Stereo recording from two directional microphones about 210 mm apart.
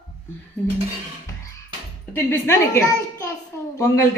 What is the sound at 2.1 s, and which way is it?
A child's voice, 10° left (ahead or behind).